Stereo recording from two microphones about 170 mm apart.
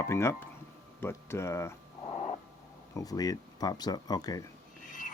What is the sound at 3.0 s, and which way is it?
Speech, 20° left (ahead or behind).